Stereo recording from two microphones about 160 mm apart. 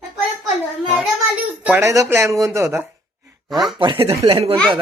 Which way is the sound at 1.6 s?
10° right (ahead or behind).